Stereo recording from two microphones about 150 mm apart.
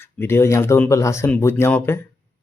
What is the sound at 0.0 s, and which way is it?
Speech, 15° left (ahead or behind).